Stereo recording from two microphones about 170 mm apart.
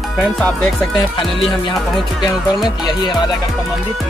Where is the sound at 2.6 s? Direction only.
25° left (ahead or behind).